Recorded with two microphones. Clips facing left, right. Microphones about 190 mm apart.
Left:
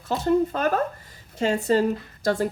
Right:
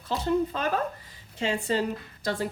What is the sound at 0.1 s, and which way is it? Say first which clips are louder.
A woman's voice: left 4 dB; 45° left (ahead or behind).